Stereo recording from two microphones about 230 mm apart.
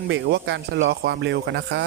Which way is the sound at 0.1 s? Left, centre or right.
Right.